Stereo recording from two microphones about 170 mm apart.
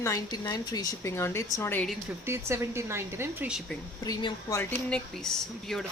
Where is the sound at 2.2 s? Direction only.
15° right (ahead or behind).